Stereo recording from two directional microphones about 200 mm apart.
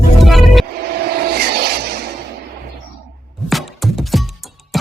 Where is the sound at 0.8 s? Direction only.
50° right (ahead or behind).